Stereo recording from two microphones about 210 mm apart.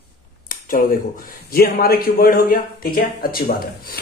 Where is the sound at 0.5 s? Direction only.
40° left (ahead or behind).